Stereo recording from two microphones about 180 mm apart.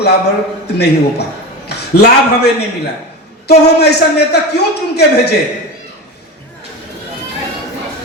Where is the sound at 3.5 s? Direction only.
65° left (ahead or behind).